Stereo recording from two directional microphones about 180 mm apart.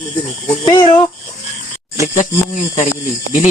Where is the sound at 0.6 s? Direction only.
30° left (ahead or behind).